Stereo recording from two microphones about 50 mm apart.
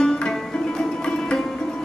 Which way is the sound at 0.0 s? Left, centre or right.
Centre.